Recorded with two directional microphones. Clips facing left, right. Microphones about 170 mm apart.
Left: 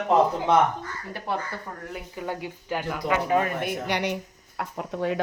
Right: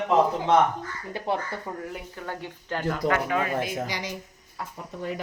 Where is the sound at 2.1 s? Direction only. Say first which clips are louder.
Left 3 dB; 15° left (ahead or behind).